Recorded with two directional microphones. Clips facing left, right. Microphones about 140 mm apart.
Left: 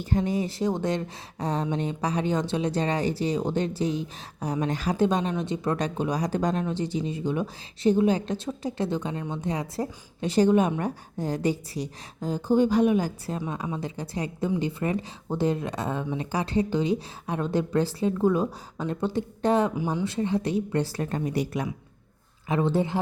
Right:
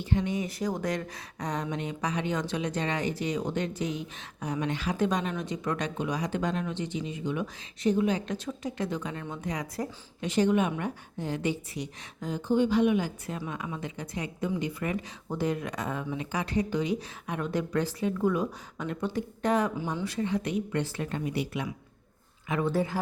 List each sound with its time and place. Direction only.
0.0 s speech: 40° left (ahead or behind)
22.4 s speech: 30° left (ahead or behind)